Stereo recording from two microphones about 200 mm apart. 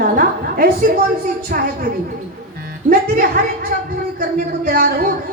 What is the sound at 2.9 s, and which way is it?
A woman's voice, 45° right (ahead or behind).